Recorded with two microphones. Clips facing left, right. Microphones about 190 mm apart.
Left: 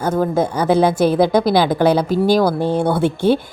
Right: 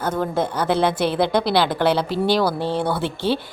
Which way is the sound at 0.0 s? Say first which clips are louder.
Left 5 dB; 10° left (ahead or behind).